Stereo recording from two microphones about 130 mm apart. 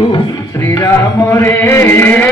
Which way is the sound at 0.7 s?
20° left (ahead or behind).